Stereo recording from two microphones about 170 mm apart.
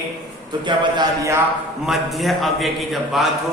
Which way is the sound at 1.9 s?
Centre (ahead or behind).